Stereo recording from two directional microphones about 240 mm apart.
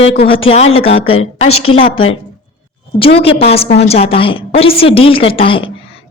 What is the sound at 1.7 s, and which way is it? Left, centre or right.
A woman's voice, left.